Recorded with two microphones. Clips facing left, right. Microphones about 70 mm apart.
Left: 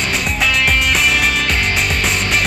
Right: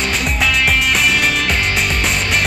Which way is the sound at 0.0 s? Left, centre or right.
Centre.